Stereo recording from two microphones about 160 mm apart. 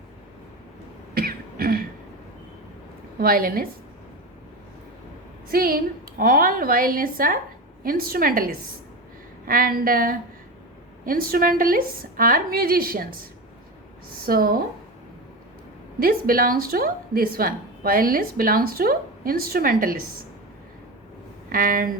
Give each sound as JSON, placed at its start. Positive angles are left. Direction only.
{"t": 1.1, "sound": "throat clearing", "side_deg": -70}
{"t": 3.2, "sound": "a woman's voice", "side_deg": -65}
{"t": 5.5, "sound": "a woman's voice", "side_deg": -65}
{"t": 14.3, "sound": "a woman's voice", "side_deg": -65}
{"t": 16.0, "sound": "a woman's voice", "side_deg": -65}
{"t": 21.5, "sound": "a woman's voice", "side_deg": -60}